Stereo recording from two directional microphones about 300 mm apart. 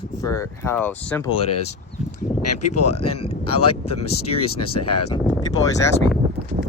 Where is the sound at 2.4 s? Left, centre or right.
Left.